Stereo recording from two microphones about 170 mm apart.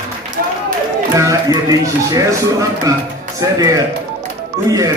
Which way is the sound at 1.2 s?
20° right (ahead or behind).